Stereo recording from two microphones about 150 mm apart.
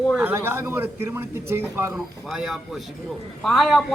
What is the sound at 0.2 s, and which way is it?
A man's voice, 15° right (ahead or behind).